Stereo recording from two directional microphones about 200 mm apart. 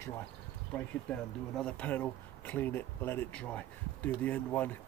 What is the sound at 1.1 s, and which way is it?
Speech, 5° left (ahead or behind).